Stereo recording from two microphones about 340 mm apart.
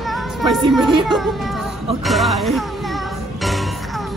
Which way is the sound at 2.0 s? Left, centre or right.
Centre.